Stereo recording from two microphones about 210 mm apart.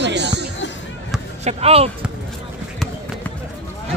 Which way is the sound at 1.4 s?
30° right (ahead or behind).